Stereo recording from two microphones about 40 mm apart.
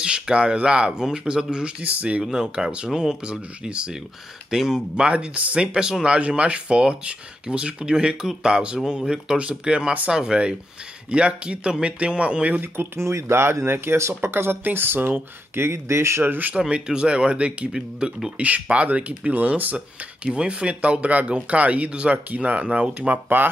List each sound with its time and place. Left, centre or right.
0.0 s speech: right
1.8 s speech: right
2.2 s speech: centre
5.1 s speech: right
5.8 s speech: centre
6.1 s speech: right
12.7 s speech: right
15.6 s speech: right
16.5 s speech: right
17.7 s speech: centre
18.4 s speech: right
20.3 s speech: right